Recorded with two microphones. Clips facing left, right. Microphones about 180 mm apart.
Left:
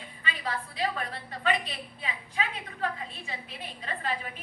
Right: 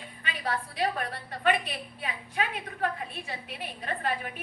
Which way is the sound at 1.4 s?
55° right (ahead or behind).